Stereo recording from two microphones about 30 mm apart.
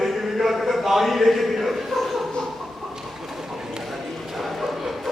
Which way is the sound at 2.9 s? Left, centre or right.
Centre.